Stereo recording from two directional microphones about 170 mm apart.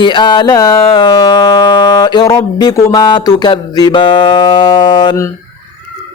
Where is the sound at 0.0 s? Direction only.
25° left (ahead or behind).